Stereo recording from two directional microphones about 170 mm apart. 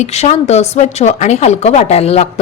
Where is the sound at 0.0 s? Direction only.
40° left (ahead or behind).